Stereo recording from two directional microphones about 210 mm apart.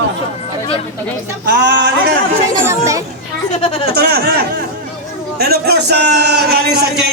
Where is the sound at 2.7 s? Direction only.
15° right (ahead or behind).